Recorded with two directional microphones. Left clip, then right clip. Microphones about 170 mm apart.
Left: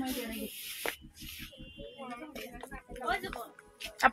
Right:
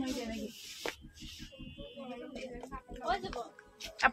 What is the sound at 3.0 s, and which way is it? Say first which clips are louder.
Music: left 1 dB; 15° left (ahead or behind).